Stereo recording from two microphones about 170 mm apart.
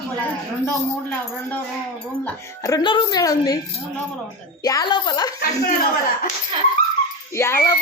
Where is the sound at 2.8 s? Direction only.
30° left (ahead or behind).